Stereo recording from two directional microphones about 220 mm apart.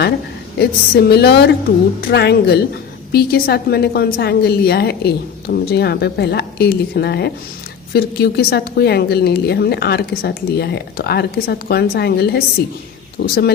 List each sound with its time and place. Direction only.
0.6 s a woman's voice: 50° left (ahead or behind)